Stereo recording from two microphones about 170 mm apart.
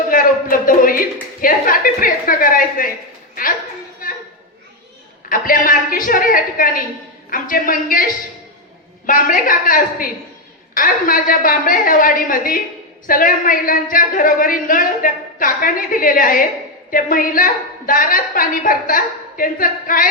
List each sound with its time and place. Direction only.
0.1 s a woman's voice: 55° left (ahead or behind)
5.3 s a woman's voice: 55° left (ahead or behind)